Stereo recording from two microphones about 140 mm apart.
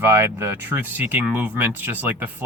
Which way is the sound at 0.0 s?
15° right (ahead or behind).